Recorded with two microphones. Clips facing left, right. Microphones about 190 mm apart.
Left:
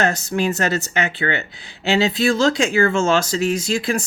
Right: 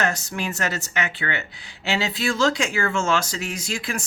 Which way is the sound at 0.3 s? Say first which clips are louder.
Left 7 dB; 30° left (ahead or behind).